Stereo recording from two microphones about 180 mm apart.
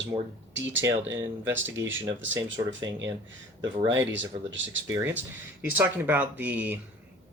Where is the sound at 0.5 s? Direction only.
90° right.